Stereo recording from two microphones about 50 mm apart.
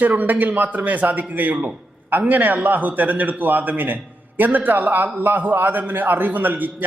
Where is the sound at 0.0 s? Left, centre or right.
Right.